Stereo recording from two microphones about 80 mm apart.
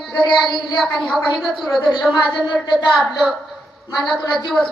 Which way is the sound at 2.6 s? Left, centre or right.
Left.